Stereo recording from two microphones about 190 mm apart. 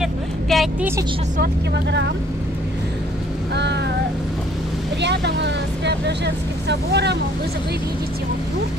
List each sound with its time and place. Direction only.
0.0 s a sound: centre (ahead or behind)
1.4 s speech: 65° right (ahead or behind)
3.5 s speech: 65° right (ahead or behind)
5.0 s speech: 65° right (ahead or behind)